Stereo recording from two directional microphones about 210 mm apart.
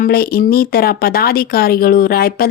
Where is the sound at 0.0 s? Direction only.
45° left (ahead or behind).